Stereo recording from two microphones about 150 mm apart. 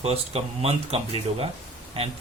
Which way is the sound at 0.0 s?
45° right (ahead or behind).